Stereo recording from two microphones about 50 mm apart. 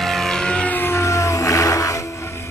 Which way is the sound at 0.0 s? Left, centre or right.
Centre.